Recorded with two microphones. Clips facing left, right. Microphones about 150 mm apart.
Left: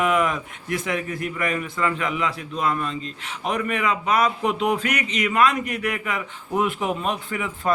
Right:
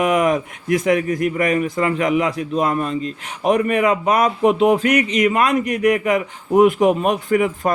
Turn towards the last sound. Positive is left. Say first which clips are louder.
# right 9 dB
turn(degrees=-45)  # may be behind; listen again after turning